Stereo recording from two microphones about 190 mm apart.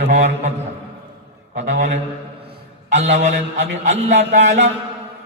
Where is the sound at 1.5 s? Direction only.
40° right (ahead or behind).